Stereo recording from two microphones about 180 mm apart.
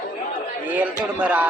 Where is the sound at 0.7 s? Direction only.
10° right (ahead or behind).